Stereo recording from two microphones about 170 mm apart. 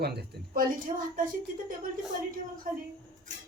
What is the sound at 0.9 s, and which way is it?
Speech, 35° right (ahead or behind).